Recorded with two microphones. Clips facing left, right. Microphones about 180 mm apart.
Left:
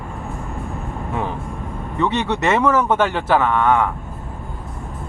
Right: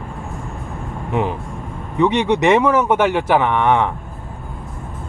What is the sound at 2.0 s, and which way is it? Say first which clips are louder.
Speech: right 5 dB; 15° right (ahead or behind).